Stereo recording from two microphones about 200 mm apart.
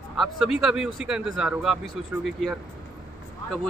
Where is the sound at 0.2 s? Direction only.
Centre (ahead or behind).